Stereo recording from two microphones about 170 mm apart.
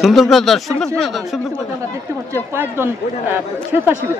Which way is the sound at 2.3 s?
15° right (ahead or behind).